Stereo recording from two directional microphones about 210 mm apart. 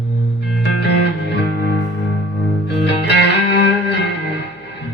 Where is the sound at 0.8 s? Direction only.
55° left (ahead or behind).